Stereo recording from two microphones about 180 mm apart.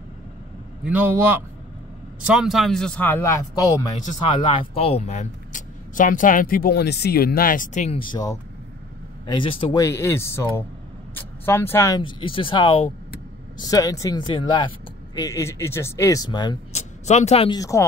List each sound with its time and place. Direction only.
0.8 s a man's voice: 10° right (ahead or behind); by 3.9 s 20° left (ahead or behind)
4.2 s speech: 30° left (ahead or behind)
9.8 s speech: 15° left (ahead or behind)
12.0 s speech: 30° left (ahead or behind)
16.7 s speech: 40° left (ahead or behind)
17.6 s speech: 15° left (ahead or behind)